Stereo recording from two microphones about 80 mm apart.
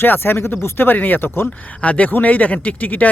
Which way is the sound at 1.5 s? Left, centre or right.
Centre.